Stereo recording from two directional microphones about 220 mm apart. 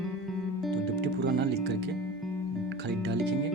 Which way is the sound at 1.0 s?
50° right (ahead or behind).